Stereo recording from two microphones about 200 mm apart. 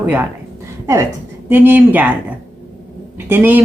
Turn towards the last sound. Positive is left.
turn(degrees=-10)  # may be behind; listen again after turning